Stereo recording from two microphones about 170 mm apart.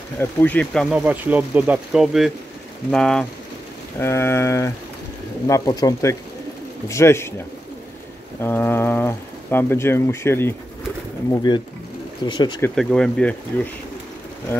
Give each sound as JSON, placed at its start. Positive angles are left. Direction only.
{"t": 0.2, "sound": "speech", "side_deg": 10}
{"t": 0.8, "sound": "speech", "side_deg": -5}
{"t": 4.0, "sound": "speech", "side_deg": 15}
{"t": 11.3, "sound": "speech", "side_deg": 25}
{"t": 12.7, "sound": "speech", "side_deg": 5}
{"t": 14.5, "sound": "speech", "side_deg": 15}